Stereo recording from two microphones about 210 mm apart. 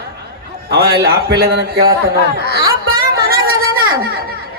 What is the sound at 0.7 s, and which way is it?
A man's voice, 50° right (ahead or behind).